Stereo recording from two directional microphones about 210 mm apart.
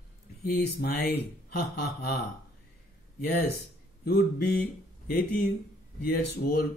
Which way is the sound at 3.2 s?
50° left (ahead or behind).